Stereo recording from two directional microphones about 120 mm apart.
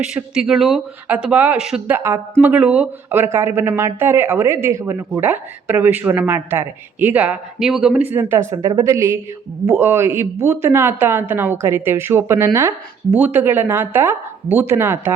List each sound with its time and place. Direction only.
0.0 s speech: 10° right (ahead or behind)
8.1 s speech: 20° right (ahead or behind)